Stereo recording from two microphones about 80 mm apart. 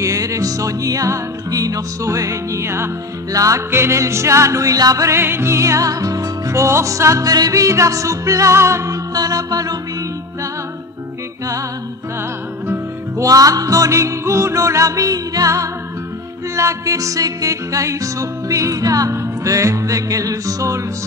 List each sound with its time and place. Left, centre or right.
0.0 s music: right
13.2 s music: right